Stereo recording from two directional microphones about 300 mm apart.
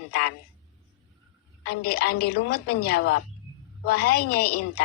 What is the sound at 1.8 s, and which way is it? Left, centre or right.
A woman's voice, left.